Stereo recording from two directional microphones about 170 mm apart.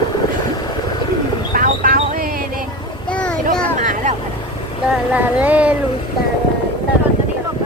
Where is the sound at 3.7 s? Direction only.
45° right (ahead or behind).